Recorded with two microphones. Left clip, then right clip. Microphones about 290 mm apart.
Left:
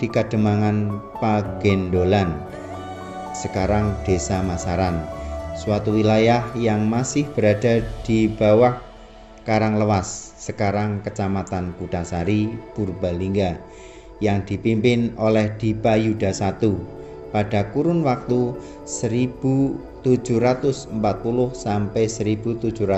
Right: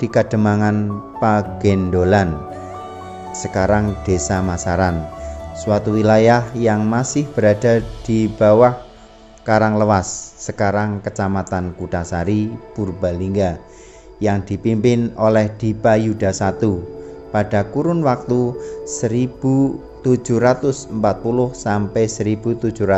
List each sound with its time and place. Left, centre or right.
0.0 s speech: right
3.3 s speech: right